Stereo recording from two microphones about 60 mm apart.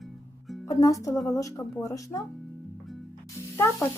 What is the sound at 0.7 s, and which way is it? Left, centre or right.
Speech, left.